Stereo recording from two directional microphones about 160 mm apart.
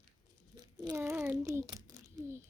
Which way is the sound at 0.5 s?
25° right (ahead or behind).